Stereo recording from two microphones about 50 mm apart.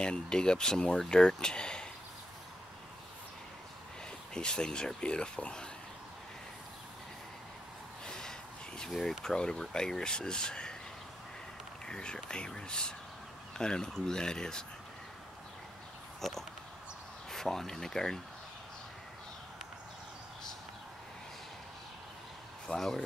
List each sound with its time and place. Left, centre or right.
0.0 s speech: centre
4.3 s speech: centre
8.0 s a sound: centre
9.2 s speech: centre
11.8 s speech: centre
16.2 s pig: centre
17.3 s speech: centre
22.8 s speech: centre